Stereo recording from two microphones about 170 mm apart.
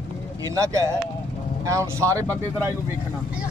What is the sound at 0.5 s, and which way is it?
A man's voice, 20° right (ahead or behind).